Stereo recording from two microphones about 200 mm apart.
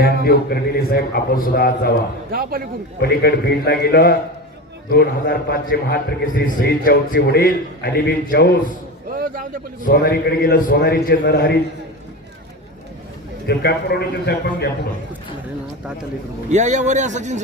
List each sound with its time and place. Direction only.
0.0 s a man's voice: 50° left (ahead or behind)
2.3 s speech: 45° right (ahead or behind)
3.0 s a man's voice: 50° left (ahead or behind)
9.1 s a sound: 45° right (ahead or behind)
9.8 s a man's voice: 50° left (ahead or behind)
13.5 s a man's voice: 55° left (ahead or behind)
16.5 s a man's voice: 35° right (ahead or behind)